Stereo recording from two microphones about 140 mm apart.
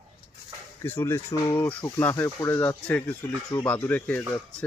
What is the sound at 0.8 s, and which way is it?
Speech, 15° left (ahead or behind).